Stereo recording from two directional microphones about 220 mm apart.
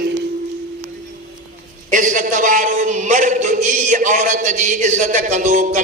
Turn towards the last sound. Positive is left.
turn(degrees=-35)  # may be behind; listen again after turning